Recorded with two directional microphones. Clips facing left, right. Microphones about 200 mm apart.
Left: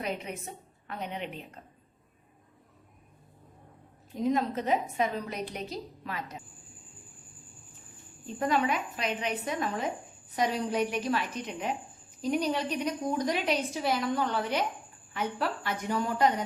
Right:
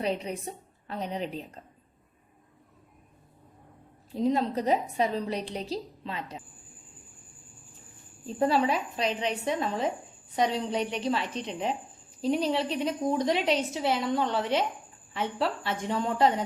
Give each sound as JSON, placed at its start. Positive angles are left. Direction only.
{"t": 0.0, "sound": "a woman's voice", "side_deg": -35}
{"t": 4.1, "sound": "a woman's voice", "side_deg": -30}
{"t": 8.3, "sound": "a woman's voice", "side_deg": -35}